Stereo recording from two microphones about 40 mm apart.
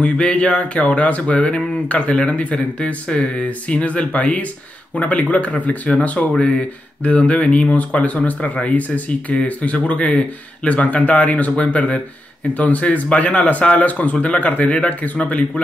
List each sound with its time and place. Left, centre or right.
0.0 s speech: left
6.2 s speech: centre
7.0 s speech: left